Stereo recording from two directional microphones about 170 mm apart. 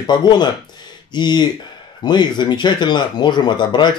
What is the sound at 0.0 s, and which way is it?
Speech, 25° left (ahead or behind).